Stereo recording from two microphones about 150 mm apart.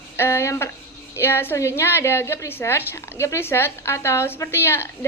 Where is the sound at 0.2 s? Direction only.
20° left (ahead or behind).